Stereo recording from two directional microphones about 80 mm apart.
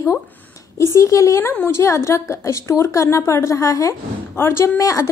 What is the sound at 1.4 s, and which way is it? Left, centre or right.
A woman's voice, left.